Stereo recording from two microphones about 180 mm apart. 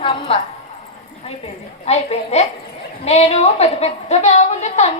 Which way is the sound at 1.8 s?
35° left (ahead or behind).